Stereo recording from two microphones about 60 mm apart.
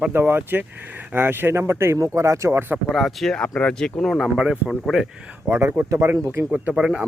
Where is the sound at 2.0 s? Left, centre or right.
Right.